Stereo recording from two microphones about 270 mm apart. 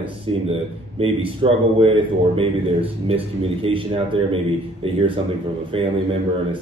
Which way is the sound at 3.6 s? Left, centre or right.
Centre.